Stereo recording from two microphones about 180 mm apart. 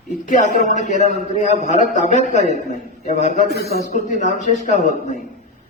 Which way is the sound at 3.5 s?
60° left (ahead or behind).